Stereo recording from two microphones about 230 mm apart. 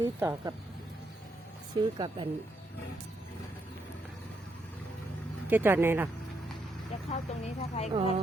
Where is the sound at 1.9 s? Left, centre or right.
Right.